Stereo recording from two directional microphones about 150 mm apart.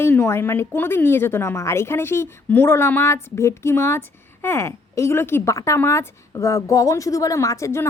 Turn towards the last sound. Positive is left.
turn(degrees=20)  # may be behind; listen again after turning